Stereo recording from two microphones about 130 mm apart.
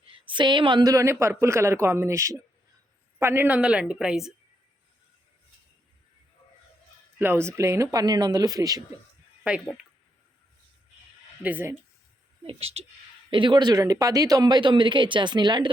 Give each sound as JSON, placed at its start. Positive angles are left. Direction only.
{"t": 0.1, "sound": "a woman's voice", "side_deg": -40}
{"t": 7.2, "sound": "a woman's voice", "side_deg": -15}
{"t": 11.4, "sound": "a woman's voice", "side_deg": -15}
{"t": 12.5, "sound": "speech", "side_deg": -50}
{"t": 13.3, "sound": "speech", "side_deg": -40}